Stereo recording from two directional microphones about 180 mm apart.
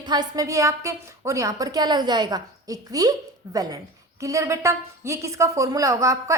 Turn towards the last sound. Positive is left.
turn(degrees=-15)  # may be behind; listen again after turning